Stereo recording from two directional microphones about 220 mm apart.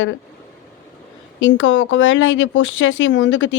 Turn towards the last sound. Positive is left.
turn(degrees=60)  # may be behind; listen again after turning